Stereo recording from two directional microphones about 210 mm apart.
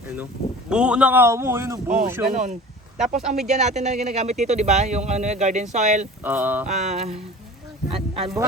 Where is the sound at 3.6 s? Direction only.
35° right (ahead or behind).